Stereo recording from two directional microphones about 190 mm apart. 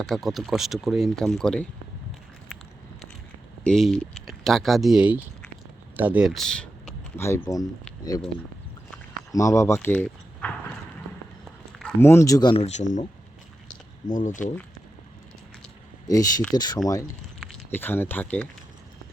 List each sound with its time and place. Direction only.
0.0 s speech: centre (ahead or behind)
3.6 s speech: 5° left (ahead or behind)
9.3 s speech: 15° left (ahead or behind)
11.8 s speech: 10° left (ahead or behind); by 13.1 s 40° left (ahead or behind)
14.1 s speech: 40° left (ahead or behind)
16.0 s speech: 20° left (ahead or behind)